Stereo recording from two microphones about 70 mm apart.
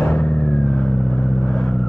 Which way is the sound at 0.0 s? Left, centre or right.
Left.